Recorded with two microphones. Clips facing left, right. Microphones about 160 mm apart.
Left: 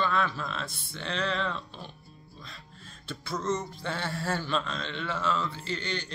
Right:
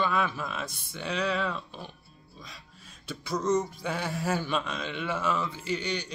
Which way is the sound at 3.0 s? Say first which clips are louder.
Right 3 dB; 15° right (ahead or behind).